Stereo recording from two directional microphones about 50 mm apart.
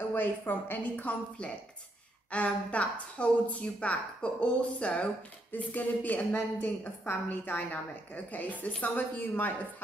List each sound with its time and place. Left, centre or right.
0.1 s a woman's voice: left
0.9 s a woman's voice: left
5.5 s a woman's voice: left
6.3 s a woman's voice: left